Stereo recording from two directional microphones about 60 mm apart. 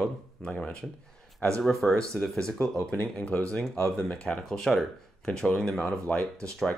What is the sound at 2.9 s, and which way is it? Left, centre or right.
Speech, left.